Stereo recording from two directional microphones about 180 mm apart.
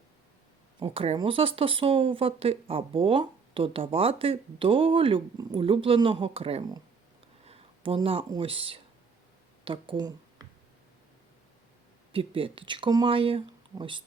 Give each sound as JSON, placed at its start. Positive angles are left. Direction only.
{"t": 0.8, "sound": "speech", "side_deg": -35}
{"t": 12.1, "sound": "speech", "side_deg": -30}